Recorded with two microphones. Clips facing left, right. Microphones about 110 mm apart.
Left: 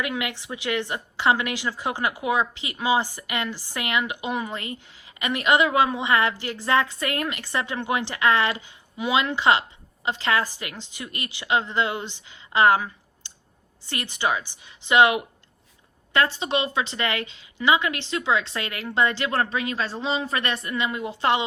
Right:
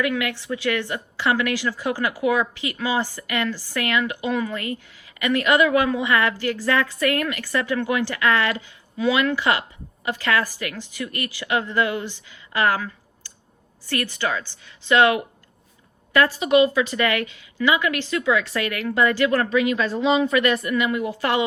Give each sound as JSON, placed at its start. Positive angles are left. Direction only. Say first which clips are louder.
{"t": 0.0, "sound": "a woman's voice", "louder": "right 5 dB", "side_deg": 20}
{"t": 16.1, "sound": "a woman's voice", "louder": "right 6 dB", "side_deg": 25}